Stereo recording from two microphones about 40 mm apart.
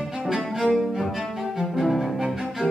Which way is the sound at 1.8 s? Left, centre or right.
Centre.